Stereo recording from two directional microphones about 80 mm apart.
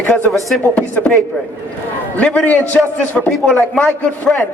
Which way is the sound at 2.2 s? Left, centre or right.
Centre.